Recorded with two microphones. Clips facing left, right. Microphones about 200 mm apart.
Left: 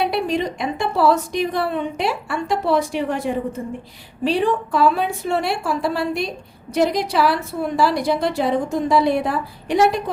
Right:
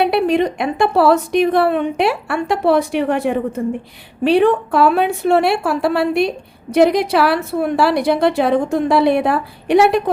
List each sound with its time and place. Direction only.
0.0 s a woman's voice: 65° right (ahead or behind)